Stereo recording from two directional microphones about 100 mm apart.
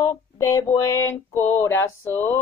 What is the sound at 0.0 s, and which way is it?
Child singing, 30° left (ahead or behind).